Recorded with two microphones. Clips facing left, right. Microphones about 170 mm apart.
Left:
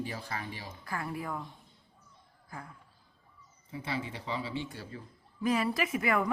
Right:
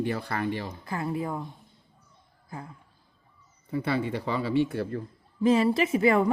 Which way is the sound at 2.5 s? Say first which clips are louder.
Right 5 dB; 25° right (ahead or behind).